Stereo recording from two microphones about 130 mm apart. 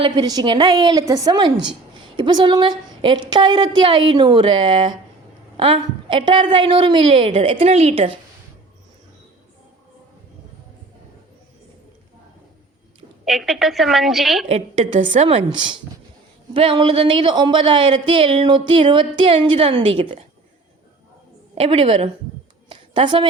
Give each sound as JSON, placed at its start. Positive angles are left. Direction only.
{"t": 0.0, "sound": "a woman's voice", "side_deg": -30}
{"t": 13.2, "sound": "a woman's voice", "side_deg": 0}
{"t": 14.4, "sound": "a woman's voice", "side_deg": -55}
{"t": 16.6, "sound": "speech", "side_deg": -45}
{"t": 21.5, "sound": "a woman's voice", "side_deg": -50}
{"t": 22.7, "sound": "a sound", "side_deg": -40}